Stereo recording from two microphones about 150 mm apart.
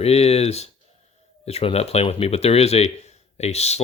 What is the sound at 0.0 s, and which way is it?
Speech, 45° left (ahead or behind).